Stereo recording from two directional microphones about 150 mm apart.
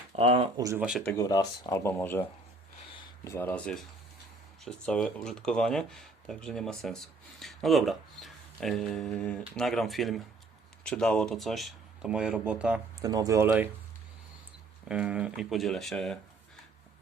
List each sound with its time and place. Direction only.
0.2 s speech: 40° right (ahead or behind)
0.5 s speech: 20° right (ahead or behind)
0.8 s speech: 5° right (ahead or behind)
1.1 s speech: 25° left (ahead or behind)
3.2 s speech: 15° left (ahead or behind); by 12.8 s 10° right (ahead or behind)
13.0 s speech: 25° right (ahead or behind)
14.8 s speech: 5° right (ahead or behind)